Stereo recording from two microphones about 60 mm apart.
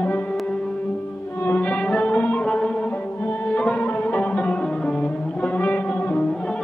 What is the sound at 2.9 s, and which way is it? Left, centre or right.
Music, left.